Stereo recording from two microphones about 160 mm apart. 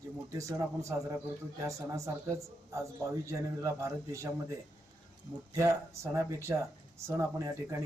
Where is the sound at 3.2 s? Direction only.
20° right (ahead or behind).